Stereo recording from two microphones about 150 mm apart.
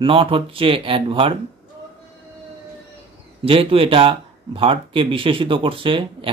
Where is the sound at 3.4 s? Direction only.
40° right (ahead or behind).